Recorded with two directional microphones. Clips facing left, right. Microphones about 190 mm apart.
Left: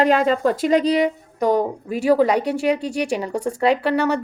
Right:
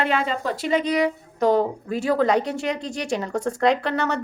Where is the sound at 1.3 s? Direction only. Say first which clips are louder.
Even; 10° left (ahead or behind).